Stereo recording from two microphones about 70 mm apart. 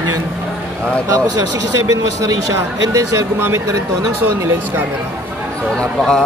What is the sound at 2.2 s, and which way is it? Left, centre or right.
Speech, right.